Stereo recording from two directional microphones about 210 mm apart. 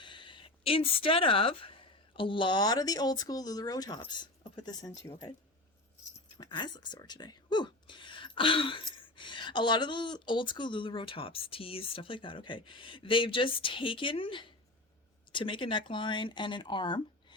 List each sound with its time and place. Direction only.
0.0 s speech: 25° left (ahead or behind)
6.3 s speech: 20° left (ahead or behind)